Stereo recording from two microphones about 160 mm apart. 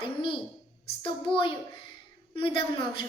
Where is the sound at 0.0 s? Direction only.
30° left (ahead or behind).